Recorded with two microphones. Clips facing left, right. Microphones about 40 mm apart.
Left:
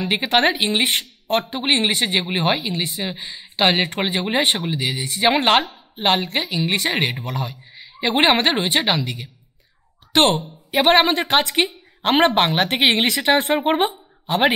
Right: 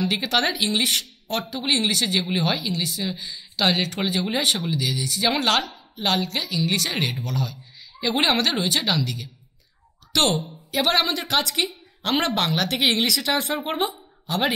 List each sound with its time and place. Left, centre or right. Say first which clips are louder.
0.0 s speech: left 4 dB; left